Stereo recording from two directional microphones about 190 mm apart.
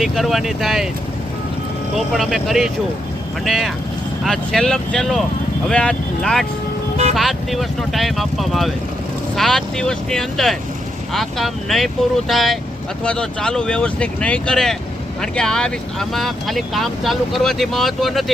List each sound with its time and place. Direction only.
0.0 s speech: centre (ahead or behind)
2.0 s speech: centre (ahead or behind)
6.9 s vehicle: 35° right (ahead or behind)
7.2 s speech: centre (ahead or behind)